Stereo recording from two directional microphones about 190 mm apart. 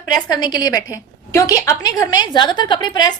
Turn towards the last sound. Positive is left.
turn(degrees=20)  # may be behind; listen again after turning